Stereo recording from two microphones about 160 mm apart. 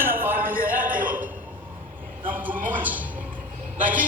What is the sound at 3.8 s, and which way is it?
Speech, 55° right (ahead or behind).